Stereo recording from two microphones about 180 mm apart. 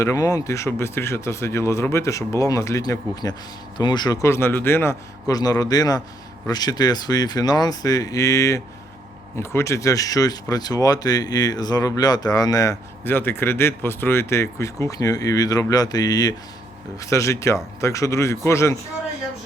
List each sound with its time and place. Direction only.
0.0 s speech: 15° left (ahead or behind)